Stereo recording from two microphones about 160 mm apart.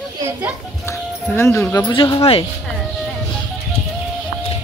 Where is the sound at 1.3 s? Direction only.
15° left (ahead or behind); by 2.4 s 35° left (ahead or behind).